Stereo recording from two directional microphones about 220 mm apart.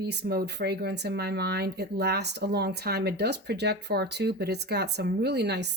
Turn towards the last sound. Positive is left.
turn(degrees=-50)  # may be behind; listen again after turning